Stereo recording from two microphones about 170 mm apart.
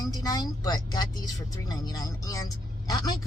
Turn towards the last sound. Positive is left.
turn(degrees=20)  # may be behind; listen again after turning